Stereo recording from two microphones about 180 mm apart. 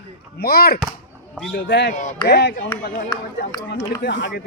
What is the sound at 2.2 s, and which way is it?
Speech, 65° left (ahead or behind).